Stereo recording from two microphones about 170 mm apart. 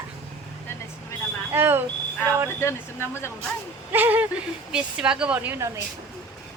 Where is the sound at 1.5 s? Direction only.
15° right (ahead or behind).